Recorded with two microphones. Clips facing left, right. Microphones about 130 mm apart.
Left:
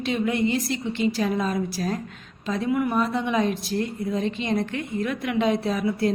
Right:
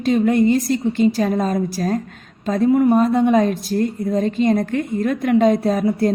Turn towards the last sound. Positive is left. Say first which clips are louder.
# right 6 dB
turn(degrees=-45)  # may be behind; listen again after turning